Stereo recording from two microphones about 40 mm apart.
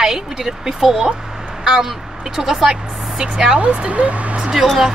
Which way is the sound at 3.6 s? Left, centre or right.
Right.